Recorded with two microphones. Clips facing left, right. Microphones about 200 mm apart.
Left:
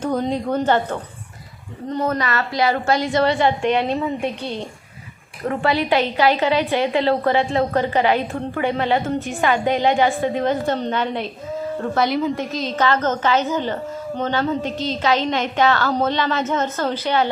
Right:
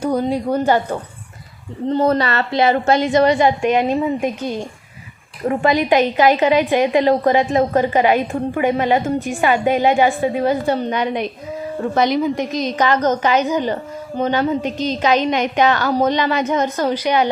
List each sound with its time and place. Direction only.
0.0 s a woman's voice: 10° right (ahead or behind)
1.9 s a woman's voice: 30° right (ahead or behind); by 17.2 s 15° right (ahead or behind)